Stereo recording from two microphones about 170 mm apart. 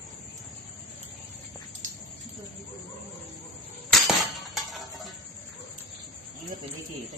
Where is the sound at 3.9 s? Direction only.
Centre (ahead or behind).